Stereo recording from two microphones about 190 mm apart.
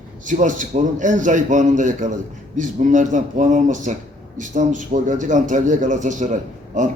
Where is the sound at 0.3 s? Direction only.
40° right (ahead or behind).